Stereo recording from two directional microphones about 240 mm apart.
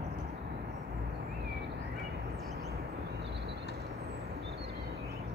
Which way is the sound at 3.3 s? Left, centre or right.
Right.